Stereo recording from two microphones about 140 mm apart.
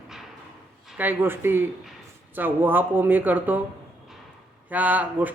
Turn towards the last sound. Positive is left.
turn(degrees=-10)  # may be behind; listen again after turning